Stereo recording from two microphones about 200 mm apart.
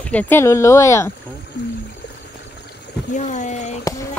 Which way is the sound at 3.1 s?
35° left (ahead or behind).